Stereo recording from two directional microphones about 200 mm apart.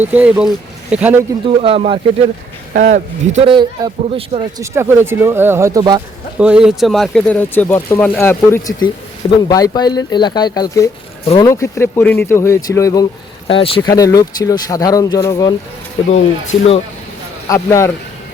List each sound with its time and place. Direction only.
0.0 s speech: 5° right (ahead or behind)
1.5 s a man's voice: 30° right (ahead or behind)
2.7 s a man's voice: 45° right (ahead or behind); by 6.0 s 20° right (ahead or behind)
6.4 s speech: 5° right (ahead or behind); by 15.5 s 15° left (ahead or behind)
16.0 s speech: 35° left (ahead or behind)
17.5 s speech: 15° left (ahead or behind)